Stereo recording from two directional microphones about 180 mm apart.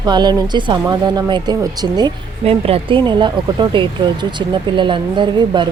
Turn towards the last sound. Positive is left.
turn(degrees=-25)  # may be behind; listen again after turning